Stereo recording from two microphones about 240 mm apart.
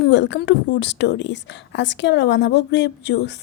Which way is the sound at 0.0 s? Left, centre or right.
Left.